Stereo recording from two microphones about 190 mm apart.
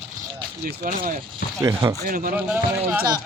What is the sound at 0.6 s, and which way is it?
Speech, 45° right (ahead or behind).